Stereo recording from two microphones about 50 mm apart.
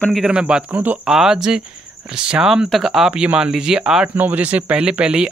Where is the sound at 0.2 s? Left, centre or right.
Centre.